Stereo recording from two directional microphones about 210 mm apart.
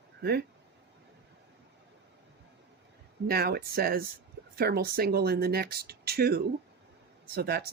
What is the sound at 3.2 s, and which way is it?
Speech, 45° right (ahead or behind).